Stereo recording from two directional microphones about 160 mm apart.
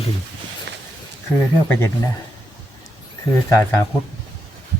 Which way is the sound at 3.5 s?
20° left (ahead or behind).